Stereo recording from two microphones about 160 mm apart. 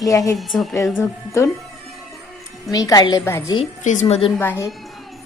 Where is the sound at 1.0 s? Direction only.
15° left (ahead or behind).